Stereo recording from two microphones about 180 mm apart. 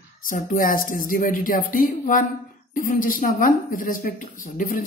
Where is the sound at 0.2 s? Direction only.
50° left (ahead or behind).